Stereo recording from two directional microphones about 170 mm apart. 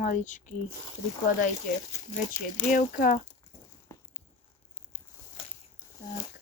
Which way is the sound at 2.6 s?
55° left (ahead or behind).